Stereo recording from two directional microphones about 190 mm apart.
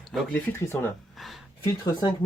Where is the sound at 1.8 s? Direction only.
20° left (ahead or behind).